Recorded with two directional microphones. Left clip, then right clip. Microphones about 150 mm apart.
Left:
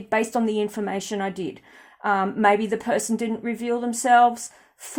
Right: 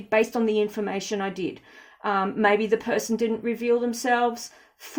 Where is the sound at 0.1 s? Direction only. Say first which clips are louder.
Right 1 dB; 40° left (ahead or behind).